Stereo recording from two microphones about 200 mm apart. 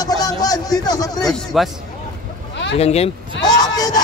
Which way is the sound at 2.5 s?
60° left (ahead or behind).